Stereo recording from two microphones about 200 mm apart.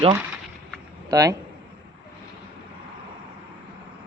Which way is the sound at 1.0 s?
15° right (ahead or behind).